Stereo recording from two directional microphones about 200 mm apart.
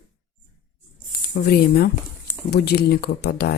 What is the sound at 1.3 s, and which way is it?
Speech, 50° left (ahead or behind).